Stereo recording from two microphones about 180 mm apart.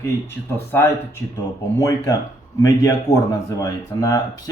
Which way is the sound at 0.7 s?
10° left (ahead or behind).